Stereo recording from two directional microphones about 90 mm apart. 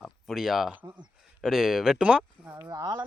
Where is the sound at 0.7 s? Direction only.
20° right (ahead or behind).